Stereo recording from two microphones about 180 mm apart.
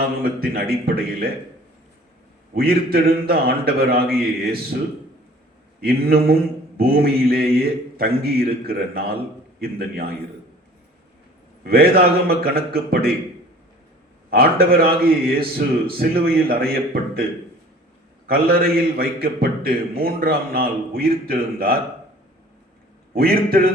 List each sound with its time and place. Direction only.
0.2 s a man's voice: 55° right (ahead or behind)
2.6 s a man's voice: 55° right (ahead or behind)
11.6 s a man's voice: 60° right (ahead or behind)
14.3 s a man's voice: 55° right (ahead or behind)
18.3 s a man's voice: 55° right (ahead or behind)
23.1 s a man's voice: 55° right (ahead or behind)